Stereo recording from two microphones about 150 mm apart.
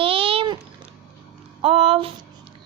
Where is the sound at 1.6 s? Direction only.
40° right (ahead or behind).